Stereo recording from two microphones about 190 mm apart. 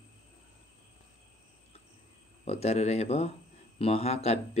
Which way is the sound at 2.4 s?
35° left (ahead or behind).